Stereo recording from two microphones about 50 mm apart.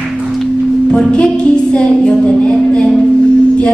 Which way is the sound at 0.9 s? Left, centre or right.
Left.